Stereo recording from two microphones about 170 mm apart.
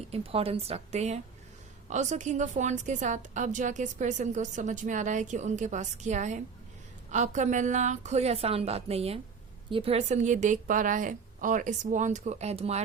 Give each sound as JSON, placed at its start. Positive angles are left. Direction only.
{"t": 0.1, "sound": "a woman's voice", "side_deg": -35}